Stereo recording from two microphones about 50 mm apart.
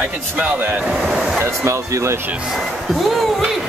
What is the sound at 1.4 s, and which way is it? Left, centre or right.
Speech, right.